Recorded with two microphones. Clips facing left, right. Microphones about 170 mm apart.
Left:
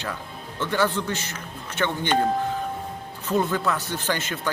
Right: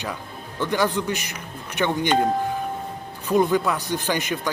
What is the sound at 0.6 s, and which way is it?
Speech, 15° right (ahead or behind).